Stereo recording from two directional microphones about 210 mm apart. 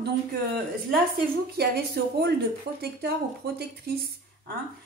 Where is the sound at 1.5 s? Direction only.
50° right (ahead or behind).